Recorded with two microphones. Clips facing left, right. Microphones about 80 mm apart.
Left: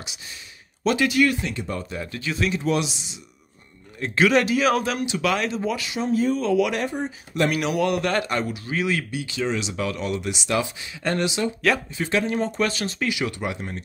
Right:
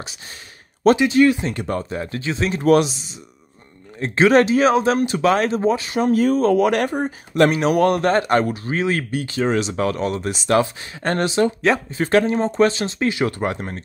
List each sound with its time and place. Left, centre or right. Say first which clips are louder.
0.9 s speech: right 5 dB; right
1.5 s speech: right 5 dB; right
1.8 s speech: right 5 dB; right
2.5 s speech: right 8 dB; right
5.9 s speech: right 3 dB; right
6.3 s speech: right 5 dB; right
12.3 s speech: right 6 dB; right